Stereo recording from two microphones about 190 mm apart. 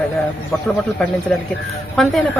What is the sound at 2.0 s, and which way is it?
Speech, centre (ahead or behind).